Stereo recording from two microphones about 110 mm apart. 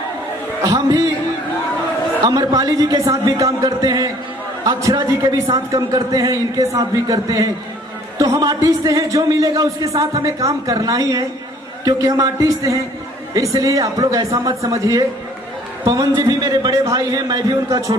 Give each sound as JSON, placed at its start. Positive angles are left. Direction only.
{"t": 0.6, "sound": "speech", "side_deg": -35}
{"t": 2.2, "sound": "a man's voice", "side_deg": -35}